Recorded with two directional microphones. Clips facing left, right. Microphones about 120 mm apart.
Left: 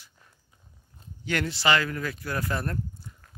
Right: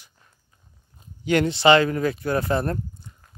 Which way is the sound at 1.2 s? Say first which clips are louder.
Right 9 dB; 20° right (ahead or behind).